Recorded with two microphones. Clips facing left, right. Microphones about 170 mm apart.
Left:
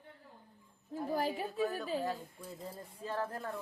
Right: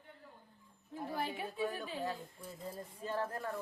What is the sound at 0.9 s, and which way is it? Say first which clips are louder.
Speech: left 5 dB; 40° left (ahead or behind).